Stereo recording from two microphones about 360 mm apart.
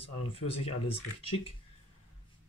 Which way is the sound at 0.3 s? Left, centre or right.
Centre.